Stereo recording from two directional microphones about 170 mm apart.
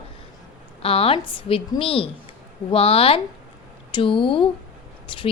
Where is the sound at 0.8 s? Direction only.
35° left (ahead or behind).